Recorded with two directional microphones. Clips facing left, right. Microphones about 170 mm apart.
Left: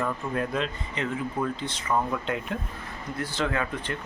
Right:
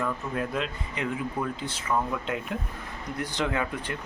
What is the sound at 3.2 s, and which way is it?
Speech, 15° right (ahead or behind).